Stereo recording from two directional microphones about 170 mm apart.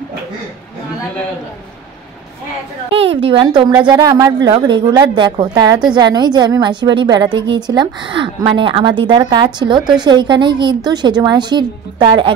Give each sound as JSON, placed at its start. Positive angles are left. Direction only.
{"t": 2.9, "sound": "a woman's voice", "side_deg": -35}